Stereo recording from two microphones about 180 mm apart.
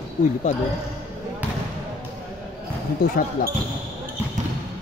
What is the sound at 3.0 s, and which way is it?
Speech, 55° left (ahead or behind).